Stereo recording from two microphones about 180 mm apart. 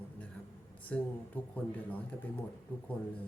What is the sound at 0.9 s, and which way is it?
Speech, 5° left (ahead or behind).